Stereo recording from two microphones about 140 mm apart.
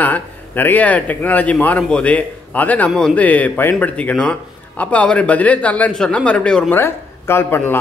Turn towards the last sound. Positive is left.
turn(degrees=15)  # may be behind; listen again after turning